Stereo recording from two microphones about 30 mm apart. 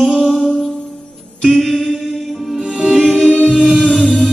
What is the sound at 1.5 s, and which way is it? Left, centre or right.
Mantra, centre.